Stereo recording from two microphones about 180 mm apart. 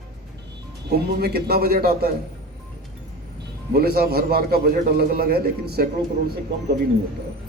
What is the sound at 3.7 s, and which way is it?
A man's voice, 60° right (ahead or behind).